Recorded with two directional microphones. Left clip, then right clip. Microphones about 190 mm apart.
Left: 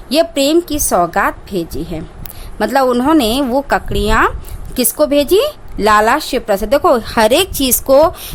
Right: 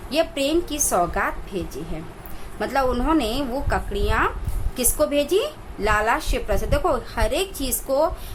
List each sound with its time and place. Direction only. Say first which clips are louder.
0.1 s a woman's voice: left 9 dB; 50° left (ahead or behind)